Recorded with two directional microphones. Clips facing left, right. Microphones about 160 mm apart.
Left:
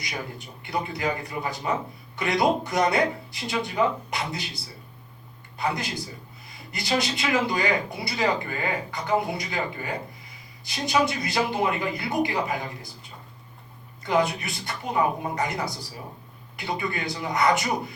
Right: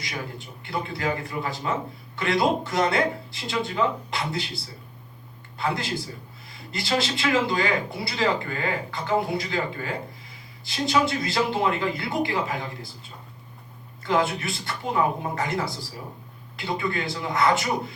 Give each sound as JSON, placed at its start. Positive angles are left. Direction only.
{"t": 0.0, "sound": "speech", "side_deg": 20}